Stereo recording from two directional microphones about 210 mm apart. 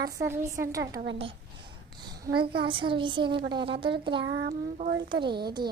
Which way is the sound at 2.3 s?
50° right (ahead or behind).